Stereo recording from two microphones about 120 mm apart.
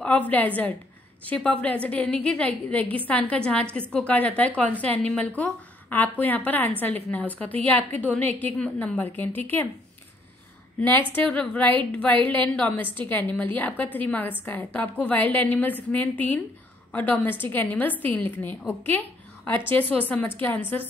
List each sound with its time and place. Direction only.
0.0 s a woman's voice: 10° left (ahead or behind)
10.8 s a woman's voice: 15° left (ahead or behind)